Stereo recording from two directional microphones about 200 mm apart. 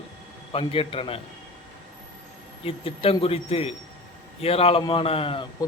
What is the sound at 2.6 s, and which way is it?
A man's voice, 30° left (ahead or behind).